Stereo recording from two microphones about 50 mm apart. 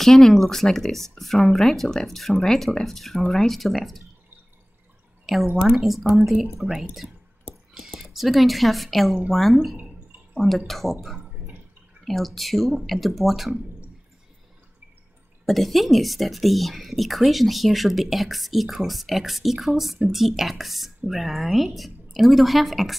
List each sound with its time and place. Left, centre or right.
0.0 s a woman's voice: centre
5.2 s a sound: centre
5.6 s a woman's voice: centre
15.4 s a woman's voice: centre